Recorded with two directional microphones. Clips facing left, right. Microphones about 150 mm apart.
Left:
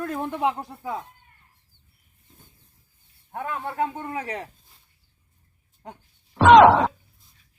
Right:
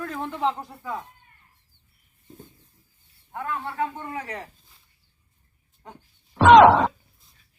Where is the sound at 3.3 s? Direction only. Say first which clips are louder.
Left 1 dB; 25° left (ahead or behind).